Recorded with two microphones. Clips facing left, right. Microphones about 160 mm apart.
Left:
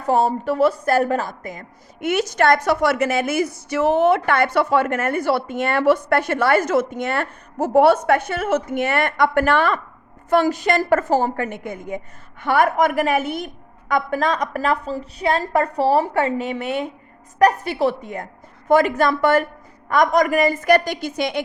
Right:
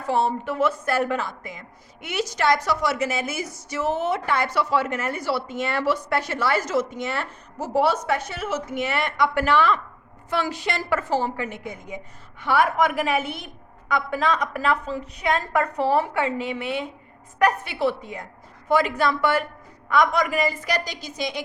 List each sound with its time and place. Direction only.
0.0 s a woman's voice: 40° left (ahead or behind); by 21.4 s 60° left (ahead or behind)